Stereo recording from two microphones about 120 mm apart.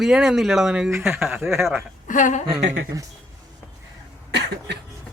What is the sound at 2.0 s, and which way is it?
Speech, 90° left.